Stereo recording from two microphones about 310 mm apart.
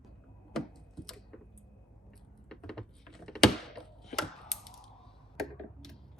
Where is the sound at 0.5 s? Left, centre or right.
Centre.